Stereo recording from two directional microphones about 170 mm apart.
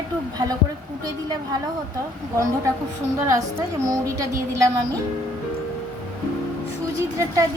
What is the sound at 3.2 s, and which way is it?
A woman's voice, 15° right (ahead or behind).